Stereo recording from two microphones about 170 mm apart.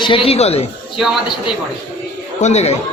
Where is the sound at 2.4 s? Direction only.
40° left (ahead or behind).